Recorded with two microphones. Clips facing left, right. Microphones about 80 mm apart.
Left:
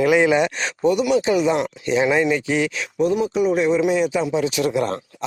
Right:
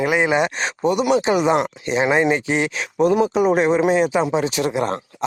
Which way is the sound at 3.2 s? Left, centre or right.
Right.